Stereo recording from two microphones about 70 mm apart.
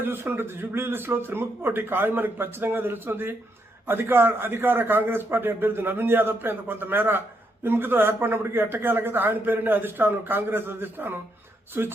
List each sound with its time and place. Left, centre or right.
0.0 s speech: right